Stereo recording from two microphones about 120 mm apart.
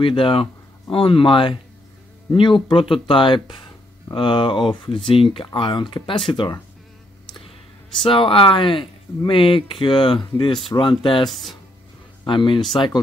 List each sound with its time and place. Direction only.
0.0 s speech: 45° left (ahead or behind)
8.0 s speech: 45° left (ahead or behind)
11.2 s speech: centre (ahead or behind)
12.3 s speech: 40° left (ahead or behind)